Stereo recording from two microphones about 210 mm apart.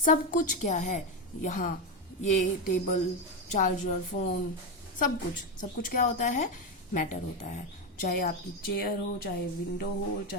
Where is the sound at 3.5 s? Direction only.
40° left (ahead or behind).